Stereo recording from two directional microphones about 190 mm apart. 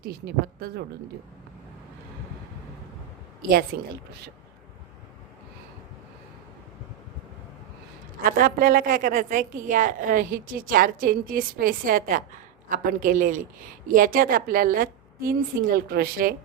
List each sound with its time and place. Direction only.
3.7 s a woman's voice: 55° right (ahead or behind)
8.2 s a woman's voice: 50° right (ahead or behind)